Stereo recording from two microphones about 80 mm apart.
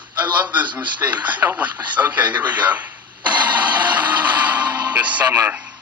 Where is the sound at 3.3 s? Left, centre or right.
Centre.